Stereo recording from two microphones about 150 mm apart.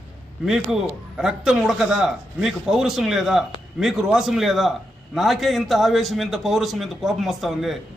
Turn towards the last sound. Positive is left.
turn(degrees=0)  # may be behind; listen again after turning